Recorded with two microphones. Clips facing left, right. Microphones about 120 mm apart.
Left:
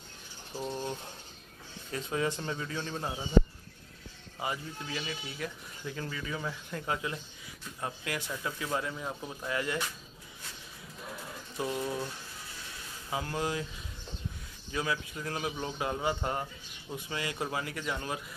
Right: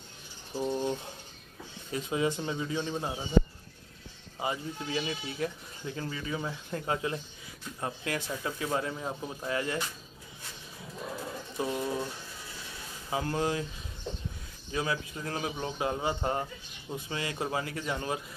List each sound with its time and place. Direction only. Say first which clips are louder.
0.6 s a man's voice: right 5 dB; 15° right (ahead or behind)
4.4 s speech: right 3 dB; 25° right (ahead or behind)
11.5 s speech: right 1 dB; 25° right (ahead or behind)
13.1 s speech: right 3 dB; 30° right (ahead or behind)
14.7 s speech: right 1 dB; 25° right (ahead or behind)